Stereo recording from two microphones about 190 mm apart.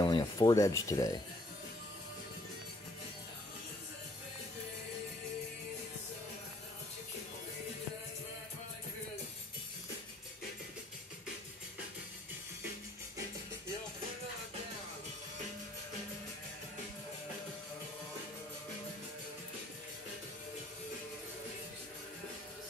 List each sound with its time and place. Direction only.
0.0 s speech: 20° left (ahead or behind)